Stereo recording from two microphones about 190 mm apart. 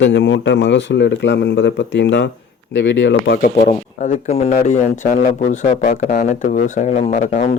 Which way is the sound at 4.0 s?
40° left (ahead or behind).